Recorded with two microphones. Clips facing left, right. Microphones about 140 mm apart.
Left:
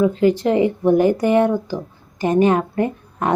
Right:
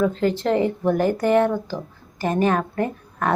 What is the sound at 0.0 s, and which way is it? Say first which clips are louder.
Speech: left 5 dB; 15° left (ahead or behind).